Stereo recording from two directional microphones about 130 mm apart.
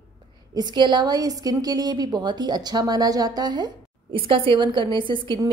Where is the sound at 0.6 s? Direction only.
35° right (ahead or behind).